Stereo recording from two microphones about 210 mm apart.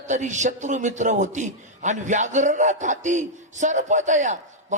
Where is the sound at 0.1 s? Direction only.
35° right (ahead or behind).